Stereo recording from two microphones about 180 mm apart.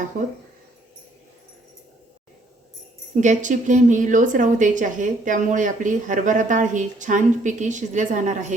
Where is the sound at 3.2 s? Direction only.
45° right (ahead or behind).